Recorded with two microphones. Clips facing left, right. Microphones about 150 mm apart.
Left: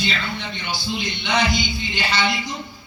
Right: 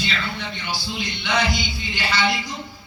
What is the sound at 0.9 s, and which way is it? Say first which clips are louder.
A man's voice: left 2 dB; 20° left (ahead or behind).